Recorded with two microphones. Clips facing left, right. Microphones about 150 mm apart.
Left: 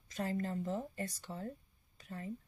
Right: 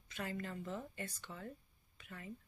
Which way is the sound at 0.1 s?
35° left (ahead or behind).